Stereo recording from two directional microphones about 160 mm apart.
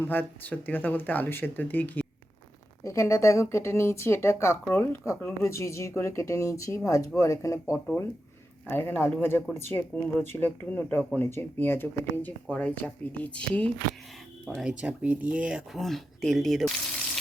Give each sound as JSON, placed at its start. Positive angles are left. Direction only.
{"t": 0.1, "sound": "speech", "side_deg": 10}